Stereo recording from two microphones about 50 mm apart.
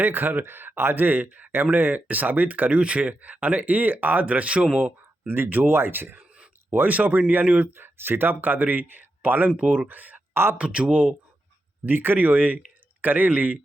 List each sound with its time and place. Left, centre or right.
0.0 s speech: right
4.8 s speech: right
6.9 s speech: right
7.8 s speech: right
10.6 s speech: right
11.9 s speech: right